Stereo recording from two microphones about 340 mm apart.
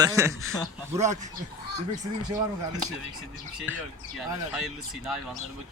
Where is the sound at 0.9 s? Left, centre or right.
Right.